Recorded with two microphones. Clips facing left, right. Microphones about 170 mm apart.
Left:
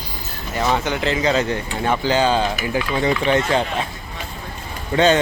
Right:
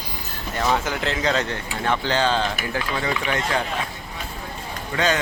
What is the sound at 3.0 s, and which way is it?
Speech, 25° left (ahead or behind).